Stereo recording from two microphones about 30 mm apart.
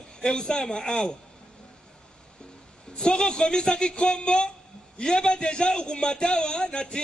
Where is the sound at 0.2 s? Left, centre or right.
Left.